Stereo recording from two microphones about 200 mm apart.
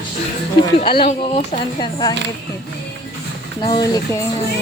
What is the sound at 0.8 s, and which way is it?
Speech, 25° left (ahead or behind).